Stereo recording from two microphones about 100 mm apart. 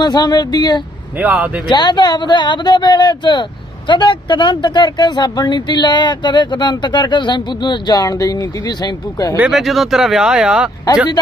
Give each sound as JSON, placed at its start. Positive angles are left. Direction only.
{"t": 0.0, "sound": "speech", "side_deg": 45}
{"t": 1.2, "sound": "speech", "side_deg": -15}
{"t": 1.6, "sound": "speech", "side_deg": 50}
{"t": 9.5, "sound": "speech", "side_deg": 0}